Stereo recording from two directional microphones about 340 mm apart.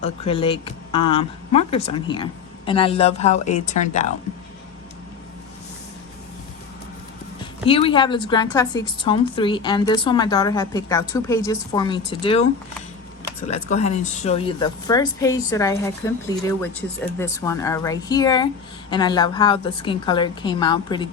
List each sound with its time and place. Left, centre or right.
0.0 s speech: centre
7.6 s speech: centre
13.5 s speech: centre